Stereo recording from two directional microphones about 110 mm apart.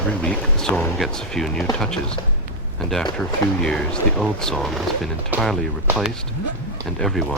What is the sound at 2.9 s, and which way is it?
Speech, 5° left (ahead or behind).